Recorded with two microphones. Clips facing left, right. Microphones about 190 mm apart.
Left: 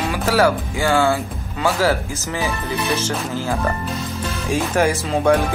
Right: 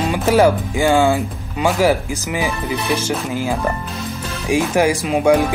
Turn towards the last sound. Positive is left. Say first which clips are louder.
# right 2 dB
turn(degrees=-10)  # may be behind; listen again after turning